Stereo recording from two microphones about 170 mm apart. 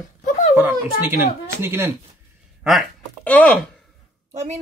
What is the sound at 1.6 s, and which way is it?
Speech, 15° right (ahead or behind).